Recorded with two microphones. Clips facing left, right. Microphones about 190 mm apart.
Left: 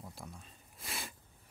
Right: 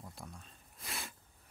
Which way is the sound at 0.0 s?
Centre (ahead or behind).